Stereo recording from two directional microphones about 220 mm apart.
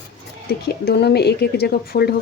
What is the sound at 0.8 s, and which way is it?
Speech, 50° left (ahead or behind).